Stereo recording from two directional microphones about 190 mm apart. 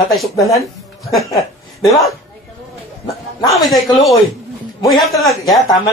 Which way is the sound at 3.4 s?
Centre (ahead or behind).